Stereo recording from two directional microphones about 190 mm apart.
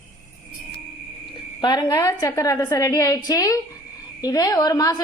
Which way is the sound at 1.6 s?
20° left (ahead or behind).